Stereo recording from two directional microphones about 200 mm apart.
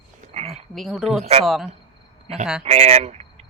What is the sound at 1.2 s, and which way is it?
Speech, 30° right (ahead or behind).